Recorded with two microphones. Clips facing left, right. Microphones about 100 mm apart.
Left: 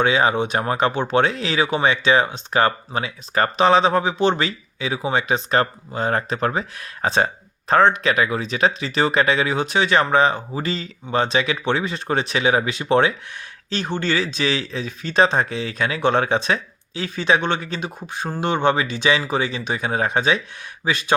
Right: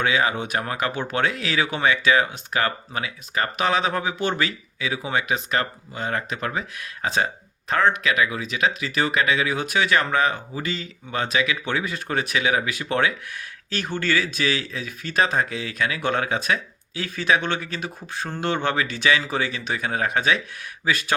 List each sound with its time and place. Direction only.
0.0 s speech: 30° left (ahead or behind)